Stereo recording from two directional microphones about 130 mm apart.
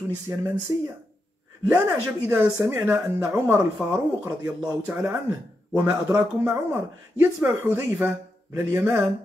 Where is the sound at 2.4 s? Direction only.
20° right (ahead or behind).